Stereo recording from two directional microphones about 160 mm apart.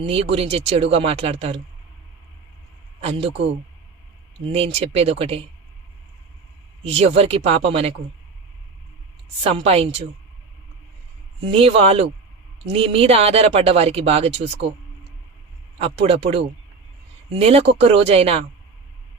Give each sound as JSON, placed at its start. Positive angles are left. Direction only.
{"t": 0.0, "sound": "speech", "side_deg": -35}
{"t": 3.0, "sound": "speech", "side_deg": -40}
{"t": 4.4, "sound": "speech", "side_deg": -40}
{"t": 6.8, "sound": "speech", "side_deg": -40}
{"t": 9.4, "sound": "speech", "side_deg": -35}
{"t": 11.5, "sound": "speech", "side_deg": -35}
{"t": 15.8, "sound": "speech", "side_deg": -40}